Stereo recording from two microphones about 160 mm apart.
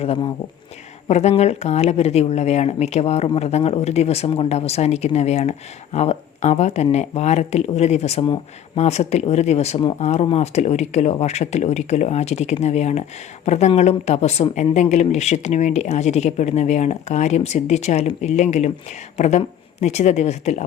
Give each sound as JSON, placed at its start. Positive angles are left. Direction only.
{"t": 0.0, "sound": "speech", "side_deg": 40}